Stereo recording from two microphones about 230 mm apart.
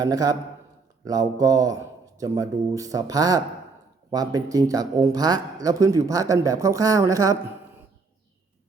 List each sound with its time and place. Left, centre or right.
0.0 s speech: centre